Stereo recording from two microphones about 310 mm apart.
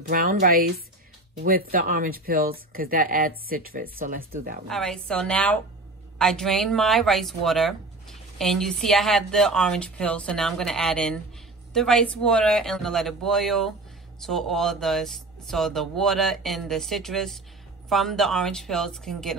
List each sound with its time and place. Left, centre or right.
0.1 s speech: right
4.6 s speech: centre